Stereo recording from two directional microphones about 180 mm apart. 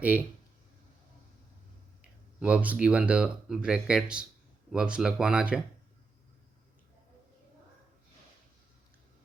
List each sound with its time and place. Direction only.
2.4 s speech: 10° right (ahead or behind)